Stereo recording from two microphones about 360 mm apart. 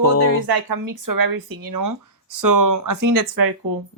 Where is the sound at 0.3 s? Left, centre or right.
Right.